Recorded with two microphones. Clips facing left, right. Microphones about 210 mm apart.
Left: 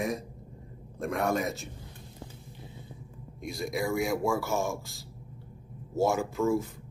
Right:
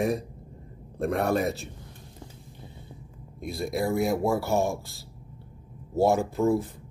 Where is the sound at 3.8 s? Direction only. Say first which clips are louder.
Right 4 dB; 35° right (ahead or behind).